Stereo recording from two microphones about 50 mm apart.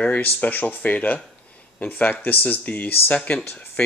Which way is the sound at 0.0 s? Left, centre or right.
Left.